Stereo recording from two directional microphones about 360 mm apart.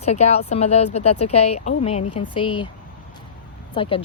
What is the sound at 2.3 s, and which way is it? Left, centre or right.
Speech, centre.